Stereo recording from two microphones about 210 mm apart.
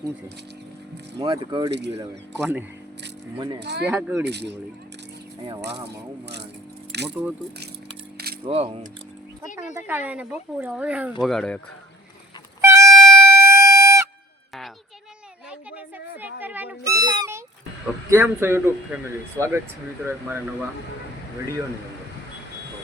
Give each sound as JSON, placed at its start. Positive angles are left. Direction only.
{"t": 1.2, "sound": "a man's voice", "side_deg": -20}
{"t": 3.3, "sound": "speech", "side_deg": -20}
{"t": 3.6, "sound": "speech", "side_deg": -55}
{"t": 3.8, "sound": "a man's voice", "side_deg": -5}
{"t": 4.3, "sound": "speech", "side_deg": -55}
{"t": 7.1, "sound": "a man's voice", "side_deg": -5}
{"t": 8.4, "sound": "speech", "side_deg": -30}
{"t": 9.7, "sound": "a man's voice", "side_deg": -10}
{"t": 12.6, "sound": "music", "side_deg": -15}
{"t": 12.9, "sound": "music", "side_deg": 0}
{"t": 13.2, "sound": "a sound", "side_deg": -15}
{"t": 16.4, "sound": "music", "side_deg": -10}
{"t": 17.2, "sound": "a sound", "side_deg": -15}
{"t": 18.1, "sound": "a man's voice", "side_deg": -10}